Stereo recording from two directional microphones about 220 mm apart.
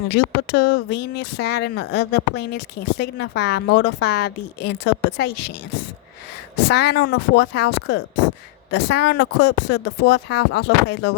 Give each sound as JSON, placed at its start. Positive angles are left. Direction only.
{"t": 0.1, "sound": "speech", "side_deg": 50}
{"t": 6.7, "sound": "speech", "side_deg": 50}